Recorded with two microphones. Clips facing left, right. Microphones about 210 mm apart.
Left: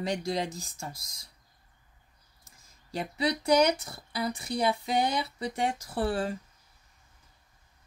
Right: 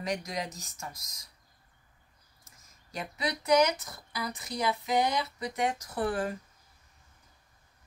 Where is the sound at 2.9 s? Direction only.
30° left (ahead or behind).